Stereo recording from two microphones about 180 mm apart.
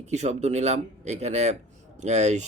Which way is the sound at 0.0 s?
40° right (ahead or behind).